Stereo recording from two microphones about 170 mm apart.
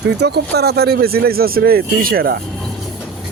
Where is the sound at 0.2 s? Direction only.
75° right (ahead or behind).